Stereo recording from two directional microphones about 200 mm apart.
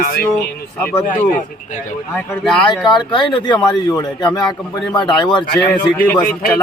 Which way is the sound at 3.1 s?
25° left (ahead or behind).